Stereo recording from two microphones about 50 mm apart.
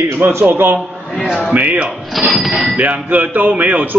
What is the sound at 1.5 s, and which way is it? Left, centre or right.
Speech, right.